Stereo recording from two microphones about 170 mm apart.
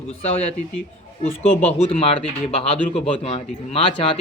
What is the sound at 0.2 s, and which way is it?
Speech, 35° left (ahead or behind).